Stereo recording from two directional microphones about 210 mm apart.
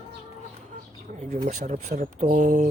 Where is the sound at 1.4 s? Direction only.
35° right (ahead or behind).